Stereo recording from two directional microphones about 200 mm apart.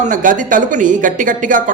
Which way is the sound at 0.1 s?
40° right (ahead or behind).